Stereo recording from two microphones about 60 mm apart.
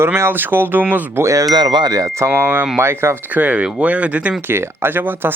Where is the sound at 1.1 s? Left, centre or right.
Right.